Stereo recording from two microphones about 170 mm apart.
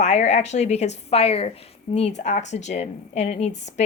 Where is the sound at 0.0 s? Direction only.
40° left (ahead or behind).